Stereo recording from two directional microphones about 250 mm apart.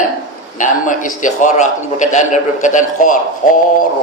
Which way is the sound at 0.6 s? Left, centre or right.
Left.